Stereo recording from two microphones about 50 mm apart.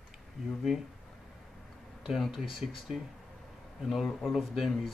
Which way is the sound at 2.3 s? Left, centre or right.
Centre.